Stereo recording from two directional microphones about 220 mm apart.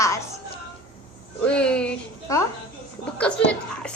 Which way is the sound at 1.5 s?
5° left (ahead or behind).